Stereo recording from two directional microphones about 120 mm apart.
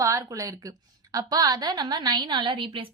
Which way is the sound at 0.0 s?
30° right (ahead or behind).